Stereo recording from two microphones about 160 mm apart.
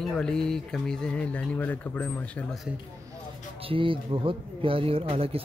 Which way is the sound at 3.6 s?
35° right (ahead or behind).